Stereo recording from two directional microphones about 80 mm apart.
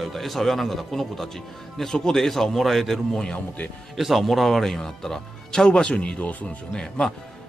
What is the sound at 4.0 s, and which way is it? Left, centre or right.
A man's voice, centre.